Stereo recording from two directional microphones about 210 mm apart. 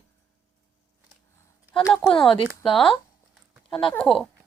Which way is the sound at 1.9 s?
Centre (ahead or behind).